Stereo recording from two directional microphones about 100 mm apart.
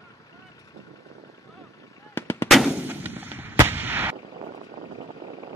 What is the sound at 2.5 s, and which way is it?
Gunshot, centre (ahead or behind).